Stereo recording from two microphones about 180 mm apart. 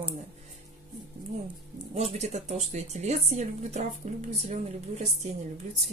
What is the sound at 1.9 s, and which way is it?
A woman's voice, 35° right (ahead or behind).